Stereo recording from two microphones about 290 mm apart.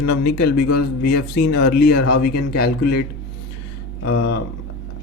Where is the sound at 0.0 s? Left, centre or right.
Left.